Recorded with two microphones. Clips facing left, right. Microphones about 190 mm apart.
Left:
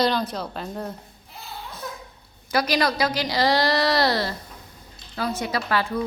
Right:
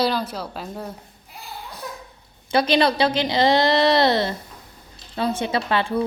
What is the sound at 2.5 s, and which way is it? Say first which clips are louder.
A woman's voice: right 4 dB; 25° right (ahead or behind).